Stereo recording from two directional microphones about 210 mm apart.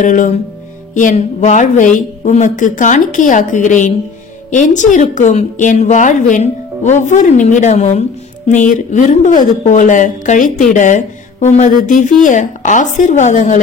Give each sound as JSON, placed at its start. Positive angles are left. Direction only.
{"t": 0.0, "sound": "speech", "side_deg": 35}